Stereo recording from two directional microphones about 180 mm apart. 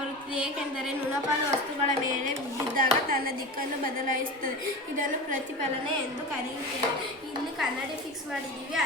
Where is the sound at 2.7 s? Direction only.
55° right (ahead or behind).